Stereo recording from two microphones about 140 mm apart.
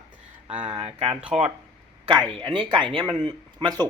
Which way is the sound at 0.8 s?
40° right (ahead or behind).